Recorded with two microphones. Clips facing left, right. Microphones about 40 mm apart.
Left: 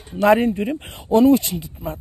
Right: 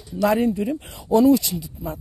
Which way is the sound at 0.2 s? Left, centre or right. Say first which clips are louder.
Left 4 dB; left.